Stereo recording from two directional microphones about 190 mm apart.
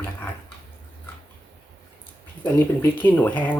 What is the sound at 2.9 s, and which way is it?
Speech, 10° left (ahead or behind).